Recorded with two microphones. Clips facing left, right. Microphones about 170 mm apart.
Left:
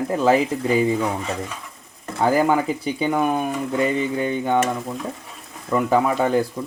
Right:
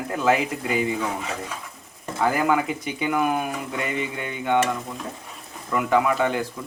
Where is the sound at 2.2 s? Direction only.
30° left (ahead or behind).